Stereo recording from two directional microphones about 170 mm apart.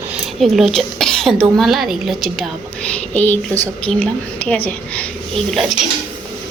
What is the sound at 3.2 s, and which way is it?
A woman's voice, 10° left (ahead or behind).